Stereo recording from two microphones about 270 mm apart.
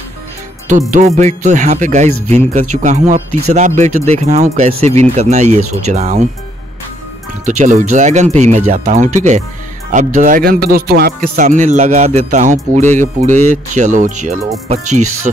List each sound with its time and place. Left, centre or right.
0.7 s speech: right
7.4 s speech: right